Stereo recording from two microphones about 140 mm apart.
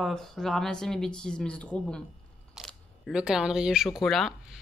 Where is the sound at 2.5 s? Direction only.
5° right (ahead or behind).